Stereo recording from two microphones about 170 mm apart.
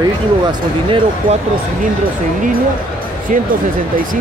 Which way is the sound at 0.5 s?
30° right (ahead or behind).